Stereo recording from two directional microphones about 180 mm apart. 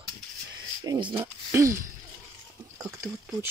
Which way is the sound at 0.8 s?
25° right (ahead or behind).